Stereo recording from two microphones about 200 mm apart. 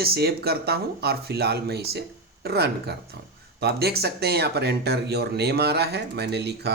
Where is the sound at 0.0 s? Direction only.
50° right (ahead or behind).